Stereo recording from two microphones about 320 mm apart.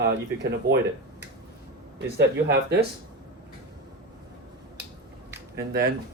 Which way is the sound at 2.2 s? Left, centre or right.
Right.